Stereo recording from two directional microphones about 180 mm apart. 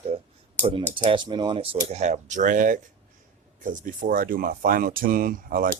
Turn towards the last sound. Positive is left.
turn(degrees=-50)  # may be behind; listen again after turning